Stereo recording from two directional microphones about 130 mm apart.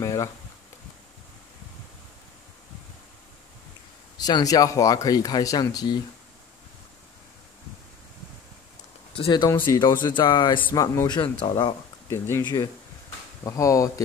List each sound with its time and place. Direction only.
0.0 s a sound: 25° left (ahead or behind)
4.2 s speech: 30° left (ahead or behind)
9.1 s speech: 40° left (ahead or behind)
10.7 s speech: 25° left (ahead or behind)
11.1 s speech: 40° left (ahead or behind)
12.1 s speech: 20° left (ahead or behind)